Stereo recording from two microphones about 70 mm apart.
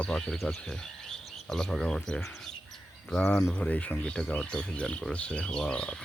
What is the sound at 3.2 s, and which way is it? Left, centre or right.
Speech, centre.